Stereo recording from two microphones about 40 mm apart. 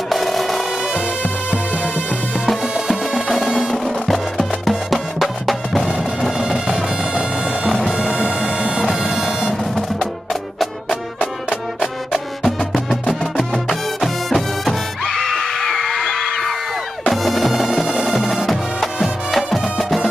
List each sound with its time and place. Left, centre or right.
0.1 s music: centre
1.5 s music: right
2.9 s music: centre
6.3 s music: centre
8.8 s music: centre
12.1 s music: centre